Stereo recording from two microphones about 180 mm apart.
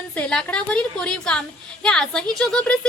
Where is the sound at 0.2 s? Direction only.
5° left (ahead or behind).